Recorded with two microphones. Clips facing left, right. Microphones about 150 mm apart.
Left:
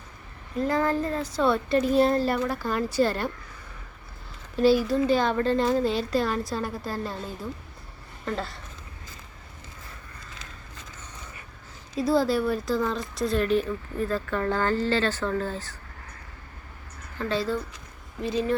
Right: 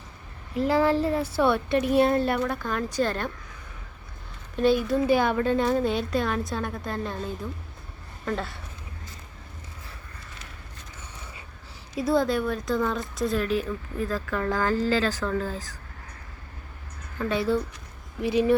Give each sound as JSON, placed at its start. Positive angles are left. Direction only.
{"t": 0.5, "sound": "a woman's voice", "side_deg": -10}
{"t": 4.5, "sound": "speech", "side_deg": 5}
{"t": 5.0, "sound": "speech", "side_deg": -10}
{"t": 8.2, "sound": "speech", "side_deg": 0}
{"t": 11.9, "sound": "speech", "side_deg": 0}
{"t": 17.2, "sound": "a woman's voice", "side_deg": -15}